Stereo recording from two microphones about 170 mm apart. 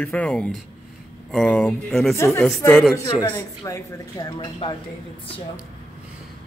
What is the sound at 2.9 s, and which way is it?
Speech, 20° left (ahead or behind).